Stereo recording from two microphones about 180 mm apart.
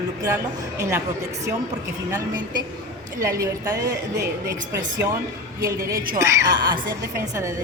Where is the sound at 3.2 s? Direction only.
20° right (ahead or behind).